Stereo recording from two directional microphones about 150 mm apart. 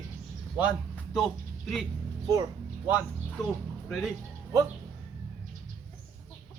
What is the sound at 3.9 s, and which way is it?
Speech, centre (ahead or behind).